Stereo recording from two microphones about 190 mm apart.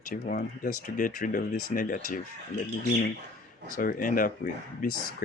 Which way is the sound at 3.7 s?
45° left (ahead or behind).